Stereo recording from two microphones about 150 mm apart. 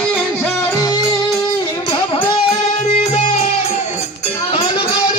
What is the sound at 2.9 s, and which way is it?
Music, 45° left (ahead or behind).